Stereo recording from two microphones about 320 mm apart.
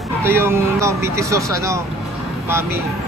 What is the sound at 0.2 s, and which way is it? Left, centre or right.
Speech, centre.